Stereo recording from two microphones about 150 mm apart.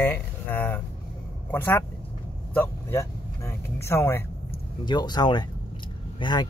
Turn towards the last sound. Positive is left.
turn(degrees=30)  # may be behind; listen again after turning